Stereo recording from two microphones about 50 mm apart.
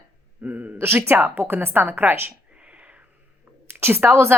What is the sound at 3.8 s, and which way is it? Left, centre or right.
Speech, right.